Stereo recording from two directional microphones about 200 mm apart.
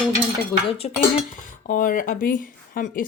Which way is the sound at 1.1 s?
40° left (ahead or behind).